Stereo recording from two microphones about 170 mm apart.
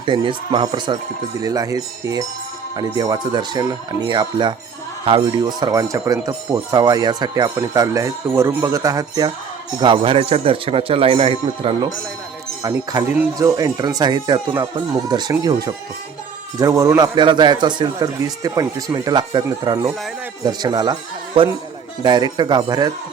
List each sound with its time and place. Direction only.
0.0 s speech: 30° right (ahead or behind)
12.6 s speech: 20° right (ahead or behind)